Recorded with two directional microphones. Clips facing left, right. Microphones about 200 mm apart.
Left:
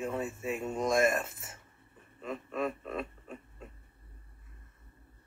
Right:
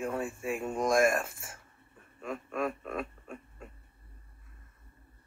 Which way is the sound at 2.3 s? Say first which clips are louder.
Right 1 dB; centre (ahead or behind).